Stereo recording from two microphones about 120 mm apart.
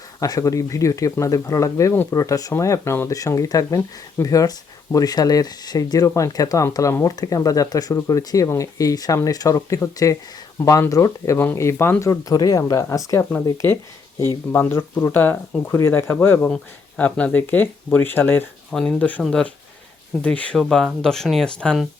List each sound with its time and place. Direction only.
0.2 s speech: 30° left (ahead or behind)
18.7 s speech: 5° left (ahead or behind)